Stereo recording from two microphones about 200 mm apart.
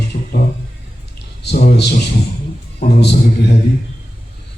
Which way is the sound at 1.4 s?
55° left (ahead or behind).